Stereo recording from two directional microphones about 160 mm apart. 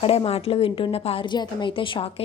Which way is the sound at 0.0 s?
35° left (ahead or behind).